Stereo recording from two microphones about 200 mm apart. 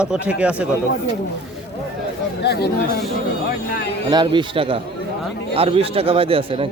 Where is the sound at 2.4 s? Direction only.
55° left (ahead or behind).